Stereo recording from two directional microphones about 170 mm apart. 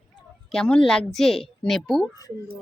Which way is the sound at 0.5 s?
5° left (ahead or behind).